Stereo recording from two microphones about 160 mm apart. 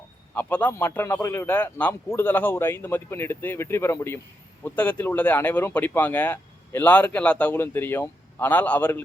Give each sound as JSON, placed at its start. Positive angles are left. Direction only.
{"t": 0.3, "sound": "speech", "side_deg": 10}